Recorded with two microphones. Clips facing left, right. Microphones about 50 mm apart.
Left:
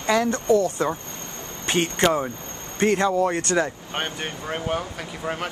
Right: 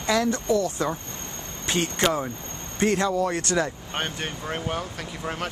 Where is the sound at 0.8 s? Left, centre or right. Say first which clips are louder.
Left 2 dB; left.